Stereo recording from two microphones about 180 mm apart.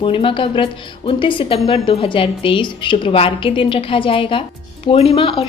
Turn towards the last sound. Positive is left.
turn(degrees=30)  # may be behind; listen again after turning